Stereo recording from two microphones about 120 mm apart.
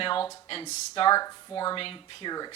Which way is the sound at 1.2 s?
30° left (ahead or behind).